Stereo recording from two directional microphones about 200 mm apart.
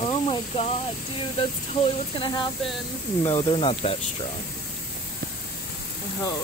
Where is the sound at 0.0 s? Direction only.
30° left (ahead or behind).